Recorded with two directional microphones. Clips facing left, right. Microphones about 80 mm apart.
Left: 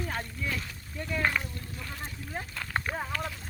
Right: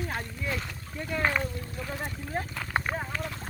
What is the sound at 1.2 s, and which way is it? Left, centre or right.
Speech, centre.